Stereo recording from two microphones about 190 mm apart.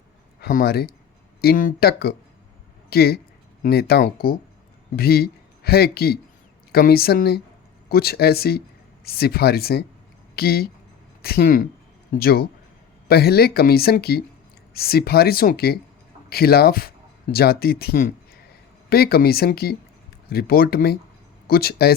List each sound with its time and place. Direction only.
0.4 s speech: 50° left (ahead or behind)